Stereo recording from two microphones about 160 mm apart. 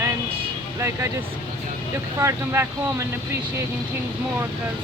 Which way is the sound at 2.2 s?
20° right (ahead or behind).